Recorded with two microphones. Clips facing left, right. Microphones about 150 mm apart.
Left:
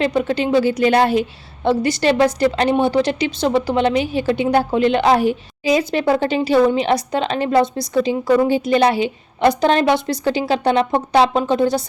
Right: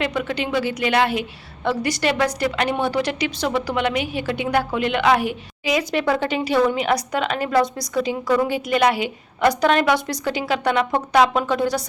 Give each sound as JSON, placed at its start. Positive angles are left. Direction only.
{"t": 0.0, "sound": "speech", "side_deg": 30}
{"t": 1.6, "sound": "a woman's voice", "side_deg": 25}